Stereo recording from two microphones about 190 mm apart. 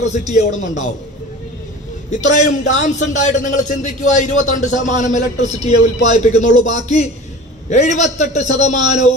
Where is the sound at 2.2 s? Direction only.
40° left (ahead or behind).